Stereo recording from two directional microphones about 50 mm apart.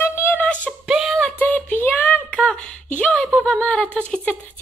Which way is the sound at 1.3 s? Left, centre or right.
Left.